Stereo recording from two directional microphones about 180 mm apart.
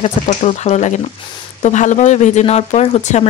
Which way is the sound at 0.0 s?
35° left (ahead or behind).